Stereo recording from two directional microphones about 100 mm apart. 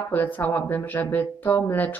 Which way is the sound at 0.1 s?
20° left (ahead or behind).